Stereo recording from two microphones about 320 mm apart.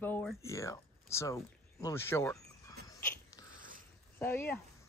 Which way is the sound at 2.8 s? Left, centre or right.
Centre.